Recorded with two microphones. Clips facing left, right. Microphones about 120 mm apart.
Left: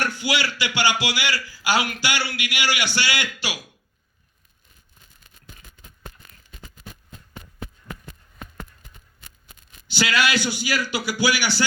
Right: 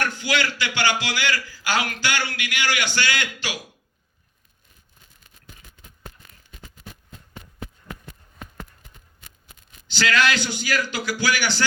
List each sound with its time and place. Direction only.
0.2 s a man's voice: 15° left (ahead or behind)
9.8 s a man's voice: 10° left (ahead or behind)